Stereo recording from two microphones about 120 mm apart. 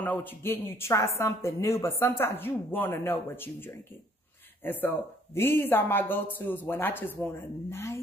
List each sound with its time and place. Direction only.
0.0 s a woman's voice: 15° left (ahead or behind)